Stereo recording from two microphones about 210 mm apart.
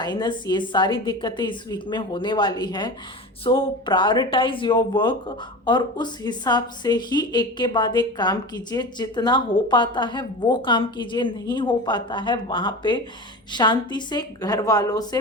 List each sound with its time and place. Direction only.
0.0 s a woman's voice: 20° left (ahead or behind)